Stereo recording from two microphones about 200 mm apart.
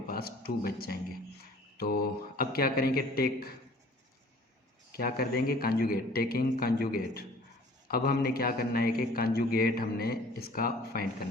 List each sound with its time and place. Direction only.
0.1 s a man's voice: 50° left (ahead or behind)
4.9 s a man's voice: 50° left (ahead or behind)